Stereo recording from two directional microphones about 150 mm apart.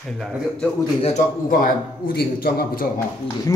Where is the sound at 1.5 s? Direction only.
70° left (ahead or behind); by 2.9 s 90° left.